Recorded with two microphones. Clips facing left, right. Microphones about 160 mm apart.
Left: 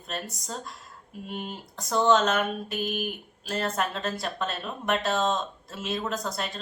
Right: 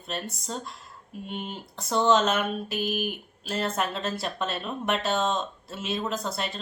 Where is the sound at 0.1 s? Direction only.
Centre (ahead or behind).